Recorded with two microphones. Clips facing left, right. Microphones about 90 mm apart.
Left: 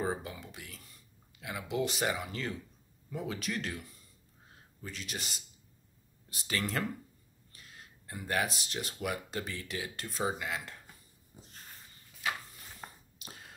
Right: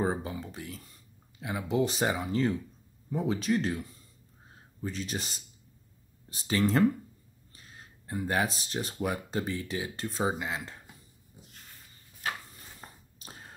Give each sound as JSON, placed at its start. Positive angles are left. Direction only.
{"t": 0.0, "sound": "speech", "side_deg": -30}
{"t": 13.2, "sound": "whispering", "side_deg": -35}